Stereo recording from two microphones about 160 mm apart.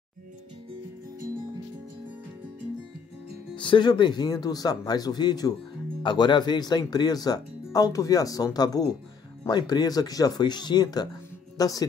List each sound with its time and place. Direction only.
3.5 s speech: 30° left (ahead or behind)